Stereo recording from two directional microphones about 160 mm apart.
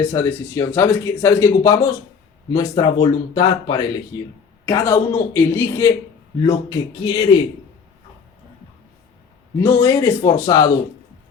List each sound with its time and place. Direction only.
0.0 s speech: 15° left (ahead or behind)
4.6 s speech: 15° left (ahead or behind)
6.4 s speech: 30° left (ahead or behind)
9.6 s speech: 15° left (ahead or behind)